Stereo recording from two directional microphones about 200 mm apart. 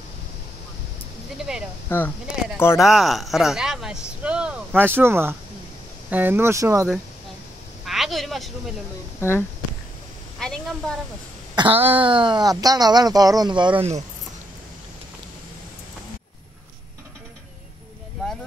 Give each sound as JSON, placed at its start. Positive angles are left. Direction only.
{"t": 1.5, "sound": "speech", "side_deg": -5}
{"t": 1.9, "sound": "speech", "side_deg": 10}
{"t": 2.8, "sound": "speech", "side_deg": 0}
{"t": 7.8, "sound": "a sound", "side_deg": 0}
{"t": 10.4, "sound": "a sound", "side_deg": 5}
{"t": 11.5, "sound": "speech", "side_deg": -25}